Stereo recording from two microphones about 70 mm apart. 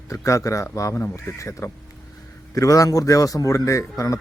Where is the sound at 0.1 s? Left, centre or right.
Left.